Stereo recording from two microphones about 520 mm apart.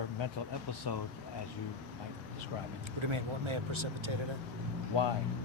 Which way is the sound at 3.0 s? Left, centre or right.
Right.